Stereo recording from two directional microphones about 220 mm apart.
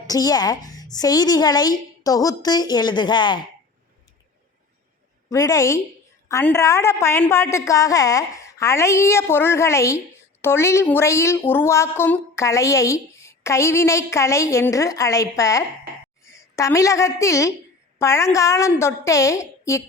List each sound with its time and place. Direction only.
0.1 s a woman's voice: 15° left (ahead or behind)
5.3 s a woman's voice: 15° left (ahead or behind)